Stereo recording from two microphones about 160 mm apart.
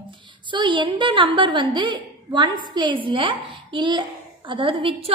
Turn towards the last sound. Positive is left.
turn(degrees=-35)  # may be behind; listen again after turning